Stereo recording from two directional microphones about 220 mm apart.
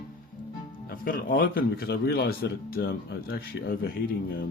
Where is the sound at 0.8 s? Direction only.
40° left (ahead or behind).